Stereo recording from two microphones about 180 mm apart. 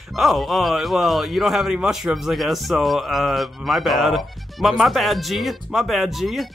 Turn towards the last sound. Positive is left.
turn(degrees=0)  # may be behind; listen again after turning